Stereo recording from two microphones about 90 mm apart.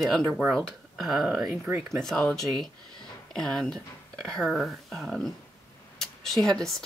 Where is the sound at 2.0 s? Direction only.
5° left (ahead or behind).